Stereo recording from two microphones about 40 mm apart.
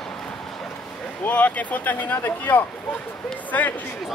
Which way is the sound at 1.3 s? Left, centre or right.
Left.